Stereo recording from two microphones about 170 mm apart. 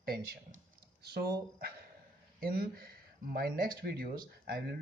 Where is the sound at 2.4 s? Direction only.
60° right (ahead or behind).